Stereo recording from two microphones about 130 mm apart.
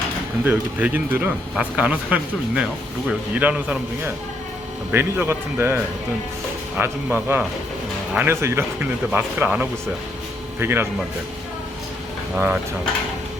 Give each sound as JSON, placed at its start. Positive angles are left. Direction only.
{"t": 0.4, "sound": "speech", "side_deg": -15}